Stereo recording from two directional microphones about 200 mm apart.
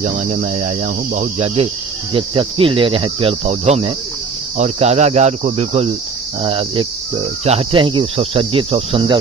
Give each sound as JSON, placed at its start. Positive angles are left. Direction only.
{"t": 0.0, "sound": "speech", "side_deg": -40}
{"t": 2.1, "sound": "cricket", "side_deg": -25}
{"t": 4.6, "sound": "speech", "side_deg": -30}
{"t": 6.4, "sound": "cricket", "side_deg": -25}